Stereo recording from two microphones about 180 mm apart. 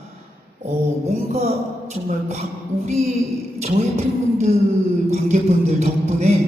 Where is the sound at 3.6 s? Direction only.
35° right (ahead or behind).